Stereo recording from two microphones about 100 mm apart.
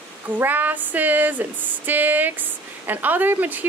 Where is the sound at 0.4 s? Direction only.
20° right (ahead or behind).